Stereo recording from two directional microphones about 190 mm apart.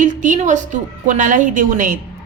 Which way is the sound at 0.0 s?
40° right (ahead or behind).